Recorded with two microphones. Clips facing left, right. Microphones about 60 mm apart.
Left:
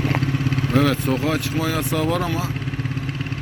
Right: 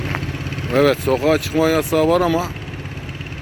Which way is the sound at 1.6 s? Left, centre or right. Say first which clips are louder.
Right 8 dB; right.